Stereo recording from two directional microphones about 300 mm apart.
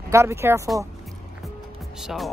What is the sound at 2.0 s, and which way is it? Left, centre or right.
Speech, centre.